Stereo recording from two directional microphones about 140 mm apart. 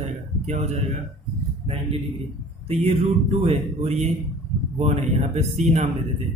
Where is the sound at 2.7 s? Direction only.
45° right (ahead or behind).